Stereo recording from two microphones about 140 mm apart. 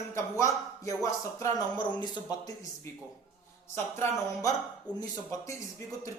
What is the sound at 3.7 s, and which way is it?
Music, 15° left (ahead or behind).